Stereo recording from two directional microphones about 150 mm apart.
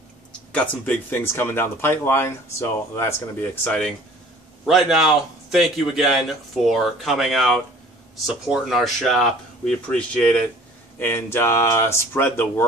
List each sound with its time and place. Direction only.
0.5 s speech: 10° left (ahead or behind)
4.6 s a man's voice: 5° right (ahead or behind); by 12.6 s 15° left (ahead or behind)